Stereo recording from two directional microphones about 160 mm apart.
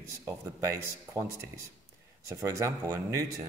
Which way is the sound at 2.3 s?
20° right (ahead or behind).